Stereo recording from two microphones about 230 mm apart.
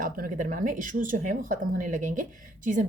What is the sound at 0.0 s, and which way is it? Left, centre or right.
A woman's voice, right.